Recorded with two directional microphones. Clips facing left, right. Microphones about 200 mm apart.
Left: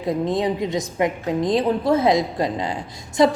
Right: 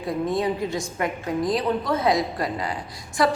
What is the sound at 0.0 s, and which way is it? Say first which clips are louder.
A woman's voice: left 3 dB; 20° left (ahead or behind).